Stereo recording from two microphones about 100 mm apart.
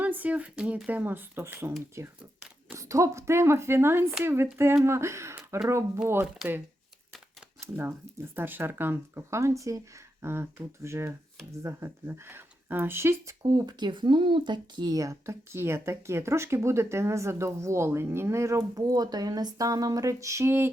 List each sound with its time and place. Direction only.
0.0 s speech: 15° right (ahead or behind)
7.6 s speech: 25° right (ahead or behind)
13.4 s speech: 40° right (ahead or behind); by 20.7 s 25° right (ahead or behind)